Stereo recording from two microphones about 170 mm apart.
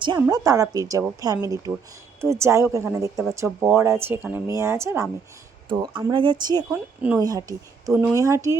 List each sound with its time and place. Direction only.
0.2 s speech: 20° right (ahead or behind)
6.7 s speech: 10° right (ahead or behind)
7.2 s speech: 20° right (ahead or behind)
7.9 s speech: 10° right (ahead or behind)